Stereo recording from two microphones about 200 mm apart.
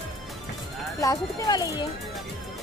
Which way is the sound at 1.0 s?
15° left (ahead or behind).